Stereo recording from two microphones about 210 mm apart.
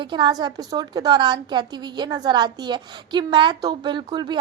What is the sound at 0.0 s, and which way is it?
A woman's voice, 20° right (ahead or behind).